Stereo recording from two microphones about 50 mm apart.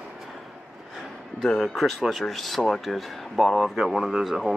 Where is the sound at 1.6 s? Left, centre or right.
Centre.